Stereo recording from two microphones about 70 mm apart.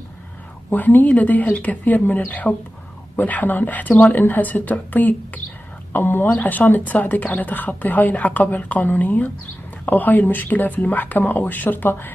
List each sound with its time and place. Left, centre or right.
0.7 s speech: left